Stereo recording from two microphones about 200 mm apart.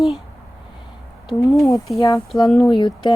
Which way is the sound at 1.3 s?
15° left (ahead or behind).